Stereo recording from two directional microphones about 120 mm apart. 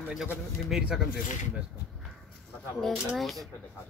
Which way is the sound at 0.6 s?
5° right (ahead or behind).